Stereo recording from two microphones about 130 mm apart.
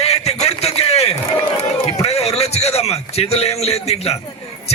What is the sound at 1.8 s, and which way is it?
A man's voice, 50° left (ahead or behind).